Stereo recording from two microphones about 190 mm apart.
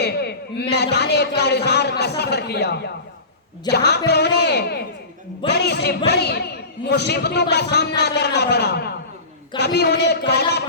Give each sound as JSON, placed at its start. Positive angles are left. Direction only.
{"t": 0.0, "sound": "a man's voice", "side_deg": 60}